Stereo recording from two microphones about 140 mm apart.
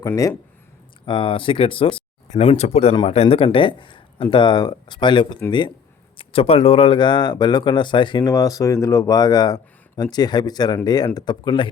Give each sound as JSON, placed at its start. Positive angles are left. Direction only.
{"t": 1.0, "sound": "speech", "side_deg": 35}